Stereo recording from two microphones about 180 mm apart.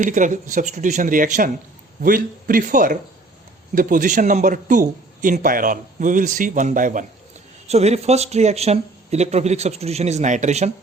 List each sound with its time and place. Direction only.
0.0 s speech: 45° right (ahead or behind)
7.7 s speech: 35° right (ahead or behind)